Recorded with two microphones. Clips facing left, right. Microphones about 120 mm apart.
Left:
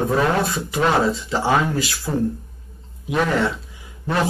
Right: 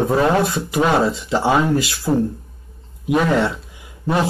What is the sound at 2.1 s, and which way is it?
Speech, 20° right (ahead or behind).